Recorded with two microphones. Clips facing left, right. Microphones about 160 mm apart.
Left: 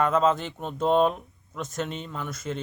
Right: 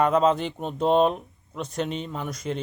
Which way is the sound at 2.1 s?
10° right (ahead or behind).